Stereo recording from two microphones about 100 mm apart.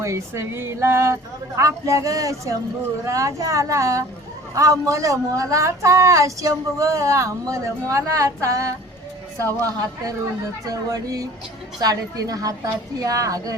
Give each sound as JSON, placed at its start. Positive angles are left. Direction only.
{"t": 0.0, "sound": "a man's voice", "side_deg": -30}